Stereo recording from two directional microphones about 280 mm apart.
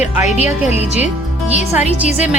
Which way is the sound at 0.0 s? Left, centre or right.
Left.